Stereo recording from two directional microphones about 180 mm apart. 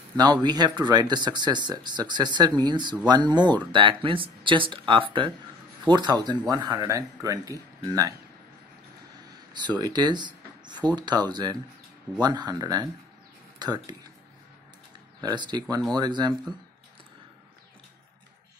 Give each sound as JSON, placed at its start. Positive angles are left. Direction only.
{"t": 0.2, "sound": "speech", "side_deg": -20}
{"t": 9.8, "sound": "speech", "side_deg": -25}
{"t": 15.2, "sound": "speech", "side_deg": -25}